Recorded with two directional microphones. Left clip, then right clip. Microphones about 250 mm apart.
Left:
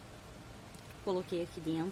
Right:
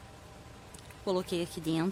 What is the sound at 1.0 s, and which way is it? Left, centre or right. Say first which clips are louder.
Speech: right 4 dB; centre.